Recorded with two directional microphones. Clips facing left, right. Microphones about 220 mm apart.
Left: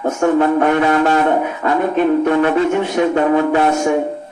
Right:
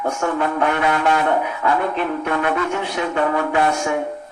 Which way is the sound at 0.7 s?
35° left (ahead or behind).